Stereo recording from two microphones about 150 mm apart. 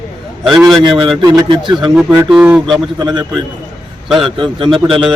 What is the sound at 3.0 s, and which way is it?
Speech, 30° right (ahead or behind).